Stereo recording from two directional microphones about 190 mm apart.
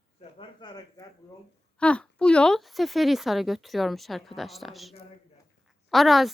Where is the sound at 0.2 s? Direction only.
25° left (ahead or behind).